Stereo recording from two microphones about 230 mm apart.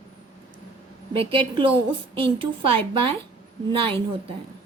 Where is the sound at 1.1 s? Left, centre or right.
Right.